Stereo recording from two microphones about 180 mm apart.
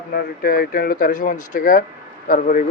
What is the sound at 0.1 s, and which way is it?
Speech, 55° left (ahead or behind).